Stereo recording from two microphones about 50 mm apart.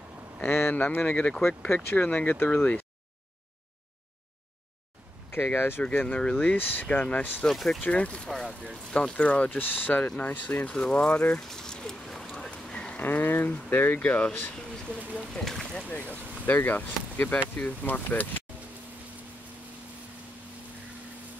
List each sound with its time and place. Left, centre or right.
0.5 s a sound: left
0.7 s speech: left
1.7 s speech: left
5.3 s speech: left
5.8 s speech: left
6.5 s speech: left
7.4 s speech: centre
7.8 s speech: left
10.0 s speech: left
10.7 s speech: centre
11.4 s a sound: centre
13.0 s speech: left
15.3 s speech: centre
15.9 s speech: left